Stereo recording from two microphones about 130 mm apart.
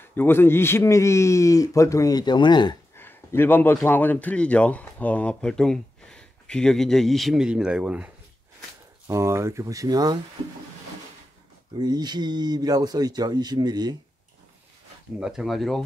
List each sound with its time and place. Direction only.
0.0 s a man's voice: 15° left (ahead or behind); by 2.8 s 35° left (ahead or behind)
3.0 s a man's voice: 15° left (ahead or behind); by 8.1 s 10° right (ahead or behind)
9.0 s speech: 20° right (ahead or behind)
11.8 s speech: 30° right (ahead or behind)
15.1 s speech: 5° right (ahead or behind)